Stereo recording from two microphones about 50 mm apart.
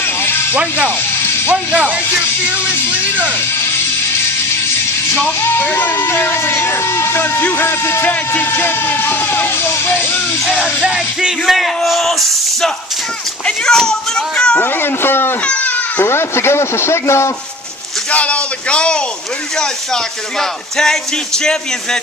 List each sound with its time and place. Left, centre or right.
0.0 s a sound: left
1.7 s music: centre
5.4 s speech: left
10.5 s music: centre
11.4 s speech: centre
14.6 s speech: left
15.4 s baby cry: left
16.1 s speech: left
18.1 s speech: left
19.6 s speech: centre